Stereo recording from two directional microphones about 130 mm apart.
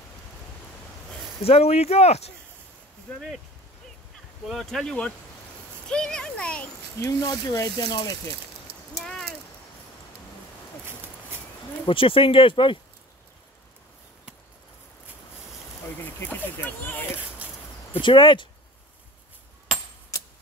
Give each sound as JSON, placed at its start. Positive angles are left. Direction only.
{"t": 1.4, "sound": "speech", "side_deg": 50}
{"t": 4.5, "sound": "speech", "side_deg": 0}
{"t": 5.9, "sound": "a sound", "side_deg": 5}
{"t": 7.0, "sound": "speech", "side_deg": 25}
{"t": 8.7, "sound": "clip-clop", "side_deg": -50}
{"t": 9.0, "sound": "a sound", "side_deg": 5}
{"t": 11.8, "sound": "speech", "side_deg": 45}
{"t": 16.0, "sound": "speech", "side_deg": 15}
{"t": 18.0, "sound": "speech", "side_deg": 40}